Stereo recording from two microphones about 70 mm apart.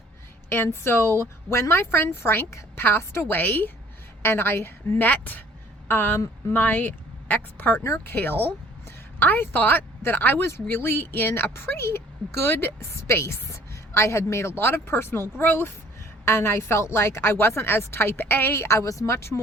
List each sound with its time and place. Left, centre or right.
0.5 s a woman's voice: left
5.9 s a woman's voice: left